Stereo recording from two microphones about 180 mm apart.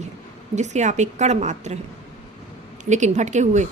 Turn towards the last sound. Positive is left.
turn(degrees=-40)  # may be behind; listen again after turning